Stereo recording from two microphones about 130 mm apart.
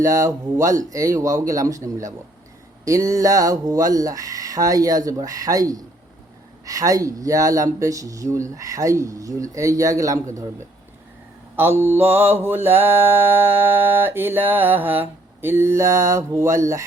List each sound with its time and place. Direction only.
0.0 s speech: 25° right (ahead or behind)
11.5 s mantra: 15° right (ahead or behind)